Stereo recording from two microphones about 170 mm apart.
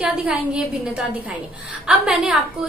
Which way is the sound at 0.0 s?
5° right (ahead or behind).